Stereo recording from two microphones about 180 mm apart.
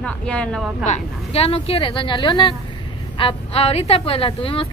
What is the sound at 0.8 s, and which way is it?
A woman's voice, 40° left (ahead or behind).